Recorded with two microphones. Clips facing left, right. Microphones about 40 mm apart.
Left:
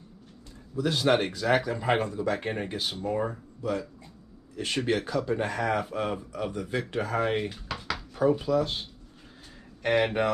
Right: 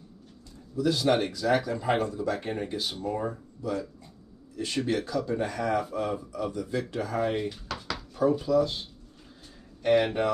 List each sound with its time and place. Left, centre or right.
0.7 s speech: left
1.5 s speech: left
4.6 s speech: left
7.6 s dishes: centre
8.1 s speech: left
9.8 s speech: centre